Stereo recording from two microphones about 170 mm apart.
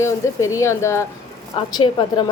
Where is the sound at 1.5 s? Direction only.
30° left (ahead or behind).